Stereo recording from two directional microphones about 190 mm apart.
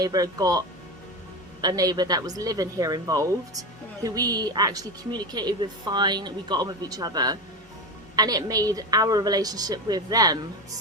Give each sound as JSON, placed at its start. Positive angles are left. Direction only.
{"t": 0.0, "sound": "a woman's voice", "side_deg": -20}
{"t": 1.6, "sound": "a woman's voice", "side_deg": -20}